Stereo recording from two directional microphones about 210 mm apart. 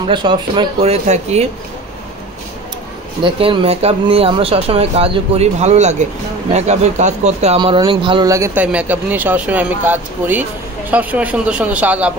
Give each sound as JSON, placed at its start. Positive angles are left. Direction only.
{"t": 0.0, "sound": "speech", "side_deg": -20}
{"t": 3.3, "sound": "speech", "side_deg": -25}